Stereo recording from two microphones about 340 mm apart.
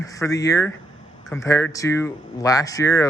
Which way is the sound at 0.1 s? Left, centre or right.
Centre.